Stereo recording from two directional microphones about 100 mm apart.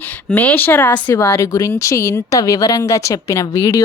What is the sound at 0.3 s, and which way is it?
Speech, 15° left (ahead or behind).